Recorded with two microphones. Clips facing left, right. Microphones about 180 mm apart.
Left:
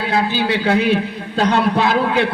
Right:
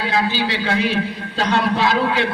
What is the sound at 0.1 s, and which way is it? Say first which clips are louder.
A man's voice: left 4 dB; 55° left (ahead or behind).